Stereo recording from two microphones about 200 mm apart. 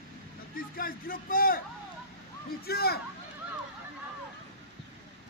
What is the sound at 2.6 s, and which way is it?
Speech, 50° left (ahead or behind).